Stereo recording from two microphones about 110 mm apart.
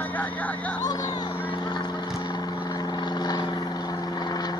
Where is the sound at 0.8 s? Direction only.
35° left (ahead or behind).